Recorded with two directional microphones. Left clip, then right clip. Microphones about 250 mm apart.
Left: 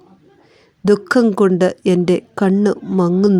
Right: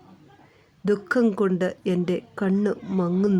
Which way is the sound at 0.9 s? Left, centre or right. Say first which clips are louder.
Left 8 dB; left.